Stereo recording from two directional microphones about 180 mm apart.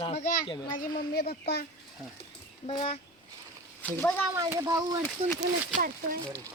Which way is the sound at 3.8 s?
10° left (ahead or behind).